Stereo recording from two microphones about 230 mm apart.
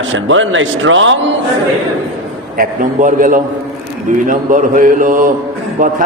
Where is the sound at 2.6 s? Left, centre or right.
Right.